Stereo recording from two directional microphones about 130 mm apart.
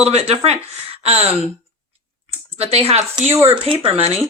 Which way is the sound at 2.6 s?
50° right (ahead or behind).